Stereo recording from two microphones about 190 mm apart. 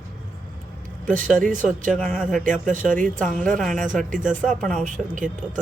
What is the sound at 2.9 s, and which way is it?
Speech, 45° right (ahead or behind).